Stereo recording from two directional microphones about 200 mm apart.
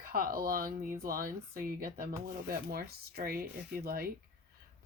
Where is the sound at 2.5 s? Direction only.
50° right (ahead or behind).